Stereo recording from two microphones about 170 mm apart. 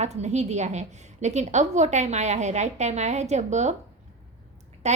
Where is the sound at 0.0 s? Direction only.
40° right (ahead or behind).